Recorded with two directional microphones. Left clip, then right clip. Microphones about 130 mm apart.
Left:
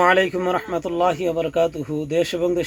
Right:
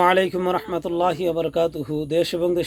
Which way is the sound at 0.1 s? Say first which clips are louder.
Left 1 dB; 35° right (ahead or behind).